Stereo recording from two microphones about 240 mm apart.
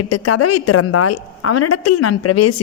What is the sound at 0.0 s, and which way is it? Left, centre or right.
A woman's voice, left.